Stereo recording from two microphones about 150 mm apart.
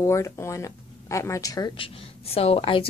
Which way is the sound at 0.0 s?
20° left (ahead or behind).